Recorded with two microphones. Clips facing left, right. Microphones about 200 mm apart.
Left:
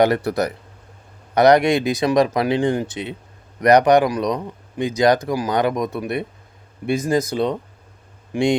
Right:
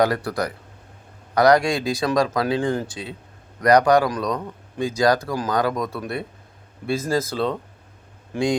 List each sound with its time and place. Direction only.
0.0 s speech: 25° left (ahead or behind)